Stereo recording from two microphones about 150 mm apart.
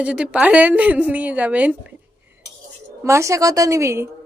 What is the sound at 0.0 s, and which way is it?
A woman's voice, 10° right (ahead or behind).